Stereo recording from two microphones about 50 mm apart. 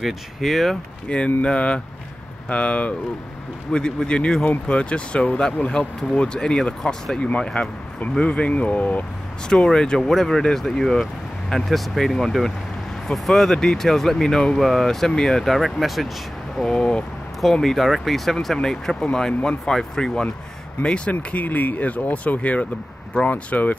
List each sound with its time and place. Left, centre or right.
0.0 s speech: centre
1.0 s speech: left
3.7 s speech: centre
7.2 s speech: left
9.5 s speech: centre
16.6 s speech: centre
17.4 s speech: centre; by 23.8 s left